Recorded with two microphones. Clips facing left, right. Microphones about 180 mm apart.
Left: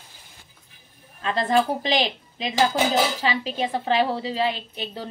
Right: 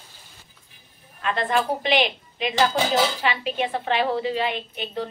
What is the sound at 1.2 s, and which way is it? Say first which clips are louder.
A woman's voice: left 2 dB; 35° left (ahead or behind).